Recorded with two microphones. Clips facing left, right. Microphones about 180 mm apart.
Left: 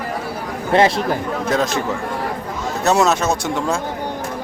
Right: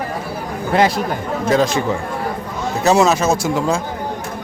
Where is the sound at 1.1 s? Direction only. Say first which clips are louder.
Right 2 dB; centre (ahead or behind).